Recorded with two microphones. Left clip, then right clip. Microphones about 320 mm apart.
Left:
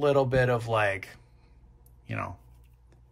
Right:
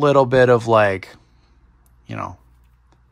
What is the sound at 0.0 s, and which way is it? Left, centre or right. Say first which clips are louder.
Speech: right 10 dB; centre.